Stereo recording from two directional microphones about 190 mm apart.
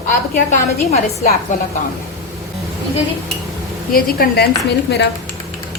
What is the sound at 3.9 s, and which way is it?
Speech, 50° left (ahead or behind).